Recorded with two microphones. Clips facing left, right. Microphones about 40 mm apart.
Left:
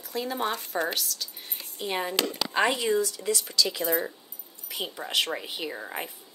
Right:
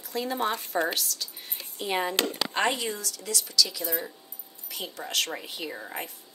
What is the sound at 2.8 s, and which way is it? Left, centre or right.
Speech, left.